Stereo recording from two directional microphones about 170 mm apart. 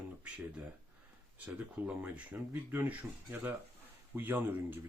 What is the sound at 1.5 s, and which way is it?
Speech, 5° right (ahead or behind).